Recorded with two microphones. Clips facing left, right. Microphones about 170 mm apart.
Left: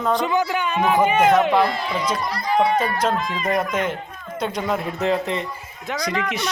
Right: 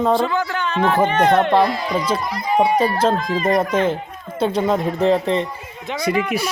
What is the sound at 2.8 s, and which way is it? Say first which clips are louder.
Speech: right 4 dB; 30° right (ahead or behind).